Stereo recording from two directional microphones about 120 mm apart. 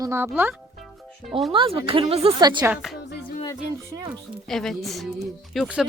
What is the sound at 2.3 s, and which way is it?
Speech, 35° right (ahead or behind).